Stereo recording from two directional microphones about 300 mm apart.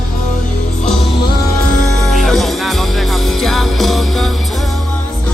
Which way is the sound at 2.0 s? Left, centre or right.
Centre.